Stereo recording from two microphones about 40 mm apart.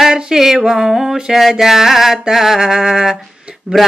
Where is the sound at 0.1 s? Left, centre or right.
Centre.